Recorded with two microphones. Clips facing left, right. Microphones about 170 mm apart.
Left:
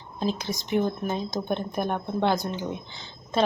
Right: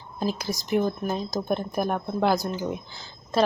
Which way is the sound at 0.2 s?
5° right (ahead or behind).